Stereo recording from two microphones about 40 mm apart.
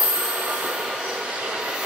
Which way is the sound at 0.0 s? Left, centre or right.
Right.